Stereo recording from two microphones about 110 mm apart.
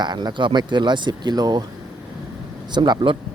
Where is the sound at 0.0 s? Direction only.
40° right (ahead or behind).